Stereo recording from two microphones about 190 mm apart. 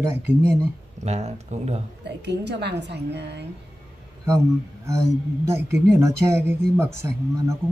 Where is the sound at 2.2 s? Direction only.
65° right (ahead or behind).